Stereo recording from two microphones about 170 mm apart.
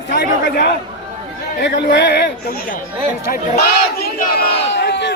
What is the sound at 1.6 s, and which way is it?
Speech, 90° left.